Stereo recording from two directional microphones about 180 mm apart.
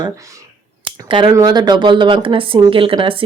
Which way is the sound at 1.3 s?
20° right (ahead or behind).